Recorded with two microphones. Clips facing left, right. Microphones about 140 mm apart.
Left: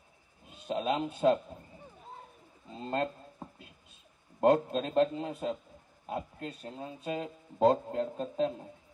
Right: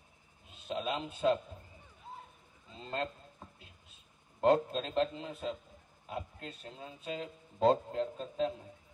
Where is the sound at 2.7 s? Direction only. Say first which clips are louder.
Left 5 dB; 40° left (ahead or behind).